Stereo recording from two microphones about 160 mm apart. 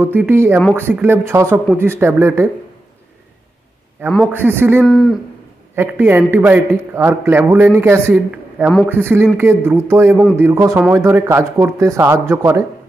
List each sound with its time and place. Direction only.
0.0 s a man's voice: 10° right (ahead or behind)
4.3 s a man's voice: 15° right (ahead or behind)
4.8 s speech: centre (ahead or behind)
5.8 s a man's voice: 15° right (ahead or behind)